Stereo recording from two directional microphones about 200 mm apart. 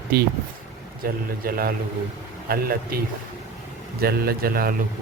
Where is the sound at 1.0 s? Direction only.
45° right (ahead or behind).